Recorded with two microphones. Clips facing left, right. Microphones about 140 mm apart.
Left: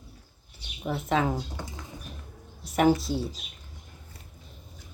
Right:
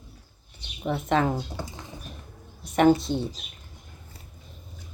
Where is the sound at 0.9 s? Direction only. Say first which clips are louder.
Right 2 dB; 5° left (ahead or behind).